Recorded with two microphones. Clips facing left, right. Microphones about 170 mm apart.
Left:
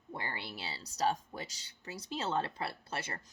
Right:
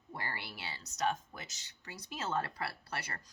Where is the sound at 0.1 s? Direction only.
20° left (ahead or behind).